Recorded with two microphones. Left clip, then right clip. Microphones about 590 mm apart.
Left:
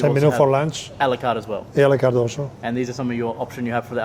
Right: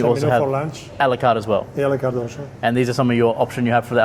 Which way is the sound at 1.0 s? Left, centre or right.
Right.